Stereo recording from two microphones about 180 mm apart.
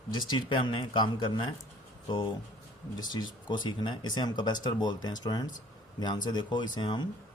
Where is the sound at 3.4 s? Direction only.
25° left (ahead or behind).